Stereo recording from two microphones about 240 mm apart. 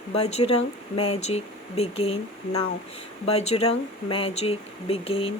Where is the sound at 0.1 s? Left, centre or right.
Left.